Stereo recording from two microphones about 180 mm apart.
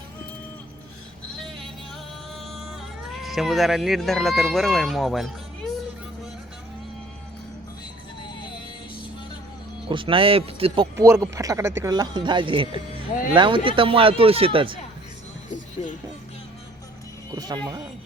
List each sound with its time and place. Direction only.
3.1 s speech: centre (ahead or behind)
9.9 s speech: 30° right (ahead or behind)
10.9 s speech: 15° right (ahead or behind)
15.4 s music: 45° left (ahead or behind)
17.3 s speech: 20° right (ahead or behind)